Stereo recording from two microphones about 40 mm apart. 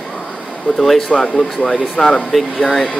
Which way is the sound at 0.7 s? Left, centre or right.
Left.